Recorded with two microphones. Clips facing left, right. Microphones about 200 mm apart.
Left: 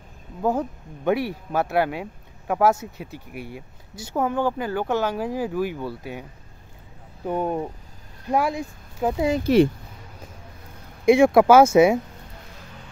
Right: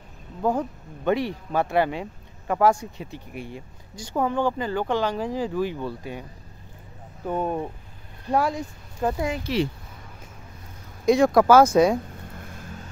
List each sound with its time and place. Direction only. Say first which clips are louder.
0.4 s speech: left 1 dB; 10° left (ahead or behind)
7.2 s speech: left 1 dB; 10° left (ahead or behind)
11.1 s speech: left 2 dB; 10° left (ahead or behind)
12.4 s vehicle: right 4 dB; 50° right (ahead or behind)